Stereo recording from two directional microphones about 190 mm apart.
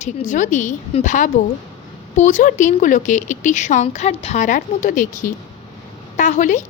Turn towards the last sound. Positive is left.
turn(degrees=40)  # may be behind; listen again after turning